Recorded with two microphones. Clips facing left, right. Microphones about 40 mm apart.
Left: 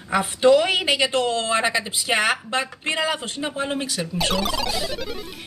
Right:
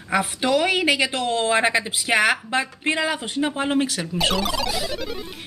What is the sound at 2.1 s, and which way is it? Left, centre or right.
Speech, centre.